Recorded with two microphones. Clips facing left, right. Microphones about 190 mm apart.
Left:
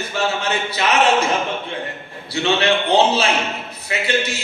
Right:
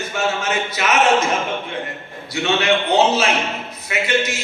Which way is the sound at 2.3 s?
30° left (ahead or behind).